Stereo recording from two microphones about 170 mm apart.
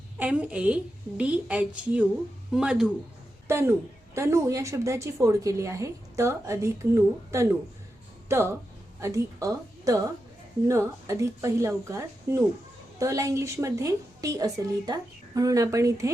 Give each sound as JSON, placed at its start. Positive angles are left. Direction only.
{"t": 0.2, "sound": "a woman's voice", "side_deg": -10}
{"t": 3.4, "sound": "a woman's voice", "side_deg": -15}